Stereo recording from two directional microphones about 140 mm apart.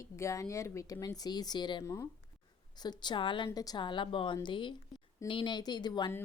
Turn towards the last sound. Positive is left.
turn(degrees=30)  # may be behind; listen again after turning